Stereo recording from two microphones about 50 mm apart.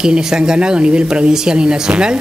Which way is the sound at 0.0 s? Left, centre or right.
Centre.